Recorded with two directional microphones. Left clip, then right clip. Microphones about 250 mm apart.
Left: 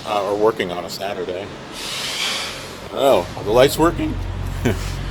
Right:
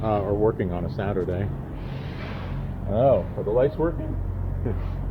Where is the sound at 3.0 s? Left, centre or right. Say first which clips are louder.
Left 5 dB; left.